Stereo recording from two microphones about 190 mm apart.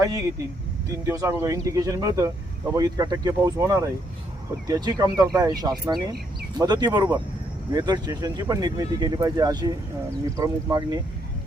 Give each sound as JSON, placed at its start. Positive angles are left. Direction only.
{"t": 1.0, "sound": "speech", "side_deg": -15}